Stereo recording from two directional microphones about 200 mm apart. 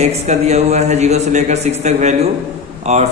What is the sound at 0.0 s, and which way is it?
A man's voice, 35° right (ahead or behind).